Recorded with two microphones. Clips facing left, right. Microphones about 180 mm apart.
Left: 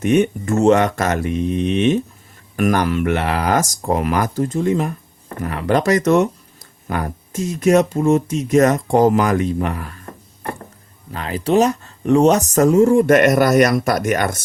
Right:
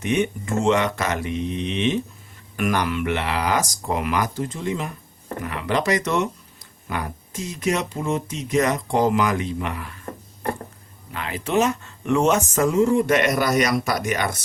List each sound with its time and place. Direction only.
0.0 s speech: 50° left (ahead or behind)
11.1 s speech: 35° left (ahead or behind)